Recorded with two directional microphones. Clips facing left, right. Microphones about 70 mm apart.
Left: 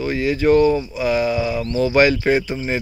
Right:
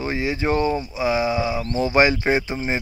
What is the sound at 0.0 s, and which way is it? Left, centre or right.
A man's voice, right.